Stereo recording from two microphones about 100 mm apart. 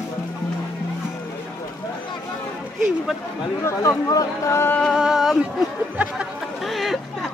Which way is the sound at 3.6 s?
30° left (ahead or behind).